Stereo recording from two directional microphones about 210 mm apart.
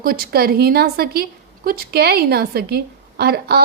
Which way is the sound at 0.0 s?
45° right (ahead or behind).